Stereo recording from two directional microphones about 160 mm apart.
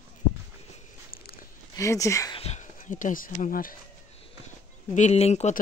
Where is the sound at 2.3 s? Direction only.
40° left (ahead or behind); by 3.7 s 60° left (ahead or behind).